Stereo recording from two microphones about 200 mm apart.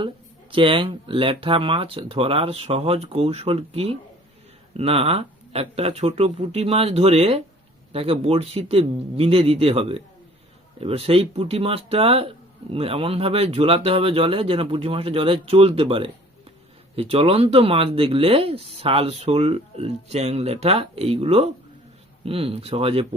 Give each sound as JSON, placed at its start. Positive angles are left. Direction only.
{"t": 0.5, "sound": "speech", "side_deg": -25}